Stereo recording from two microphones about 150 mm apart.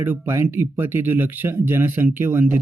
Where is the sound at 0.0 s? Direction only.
15° right (ahead or behind).